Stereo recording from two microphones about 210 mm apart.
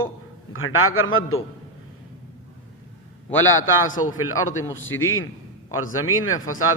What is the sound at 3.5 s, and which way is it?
A man's voice, 70° left (ahead or behind).